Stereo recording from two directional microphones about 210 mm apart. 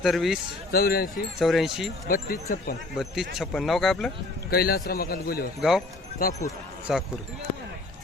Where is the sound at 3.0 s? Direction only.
Centre (ahead or behind).